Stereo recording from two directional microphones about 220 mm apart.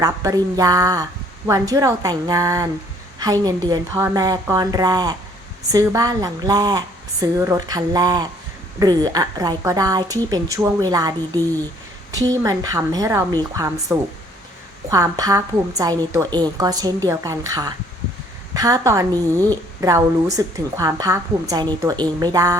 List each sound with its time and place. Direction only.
0.0 s a woman's voice: 15° right (ahead or behind)
12.3 s a woman's voice: 15° right (ahead or behind)